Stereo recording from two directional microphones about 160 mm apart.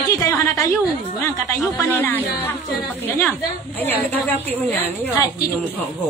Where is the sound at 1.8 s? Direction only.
10° left (ahead or behind).